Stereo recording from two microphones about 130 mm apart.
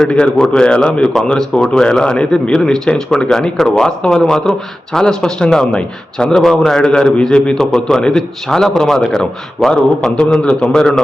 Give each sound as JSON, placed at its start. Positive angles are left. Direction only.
{"t": 0.0, "sound": "a man's voice", "side_deg": 10}